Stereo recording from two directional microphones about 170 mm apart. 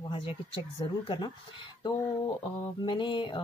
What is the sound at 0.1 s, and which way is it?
Speech, 30° left (ahead or behind).